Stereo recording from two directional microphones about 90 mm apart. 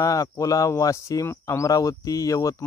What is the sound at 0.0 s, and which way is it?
A man's voice, 40° left (ahead or behind).